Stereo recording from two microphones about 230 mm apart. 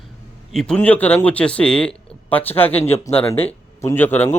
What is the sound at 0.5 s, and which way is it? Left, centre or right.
A man's voice, centre.